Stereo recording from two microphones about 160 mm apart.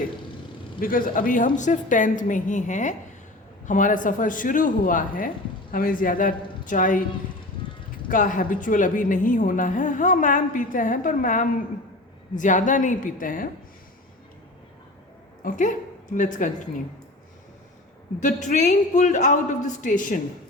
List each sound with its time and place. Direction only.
0.8 s a woman's voice: 60° left (ahead or behind)
7.6 s a sound: 30° left (ahead or behind)
8.1 s a woman's voice: 55° left (ahead or behind)
15.4 s speech: 50° left (ahead or behind)
18.2 s speech: 50° left (ahead or behind)